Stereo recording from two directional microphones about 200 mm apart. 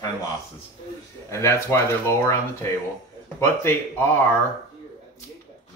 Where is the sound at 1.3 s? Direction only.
15° left (ahead or behind).